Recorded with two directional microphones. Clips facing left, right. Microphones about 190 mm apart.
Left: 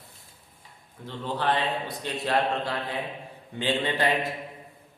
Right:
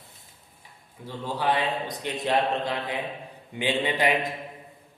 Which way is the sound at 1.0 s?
10° right (ahead or behind).